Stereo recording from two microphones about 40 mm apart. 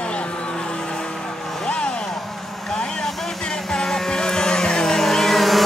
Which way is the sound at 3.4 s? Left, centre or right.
Centre.